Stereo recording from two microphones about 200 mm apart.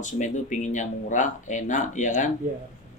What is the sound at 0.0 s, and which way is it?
Speech, 40° left (ahead or behind).